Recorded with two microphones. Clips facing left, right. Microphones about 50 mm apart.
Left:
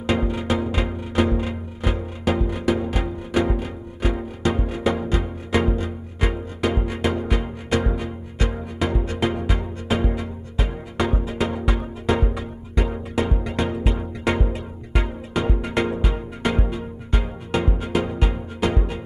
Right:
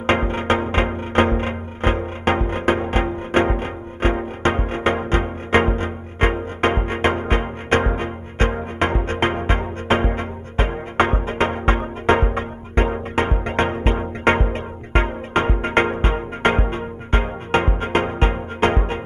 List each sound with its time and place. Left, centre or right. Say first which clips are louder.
0.0 s music: right 3 dB; right